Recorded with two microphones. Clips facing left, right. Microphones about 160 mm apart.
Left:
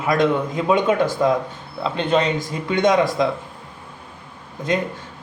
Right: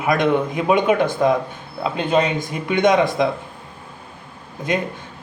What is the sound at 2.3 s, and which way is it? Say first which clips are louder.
Speech: right 1 dB; 55° right (ahead or behind).